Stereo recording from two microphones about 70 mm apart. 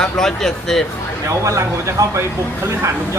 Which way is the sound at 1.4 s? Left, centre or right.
Right.